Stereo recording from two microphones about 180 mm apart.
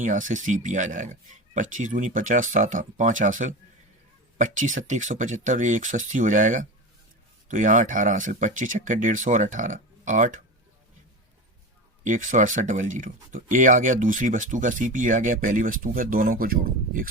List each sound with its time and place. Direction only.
0.0 s speech: 45° right (ahead or behind)
12.0 s speech: 45° right (ahead or behind)